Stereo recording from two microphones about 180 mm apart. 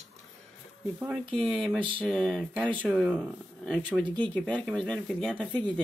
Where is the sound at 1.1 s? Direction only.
Centre (ahead or behind).